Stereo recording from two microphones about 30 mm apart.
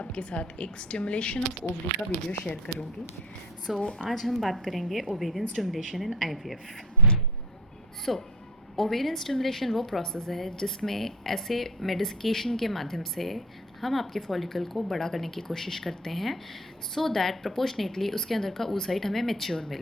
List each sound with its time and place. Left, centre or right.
0.1 s speech: left
3.7 s a woman's voice: centre
4.2 s a woman's voice: centre
8.1 s a woman's voice: centre